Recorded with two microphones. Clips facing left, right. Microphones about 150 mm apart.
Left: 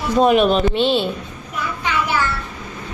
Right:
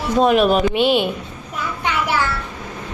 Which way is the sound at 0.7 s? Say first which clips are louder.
Right 1 dB; 15° right (ahead or behind).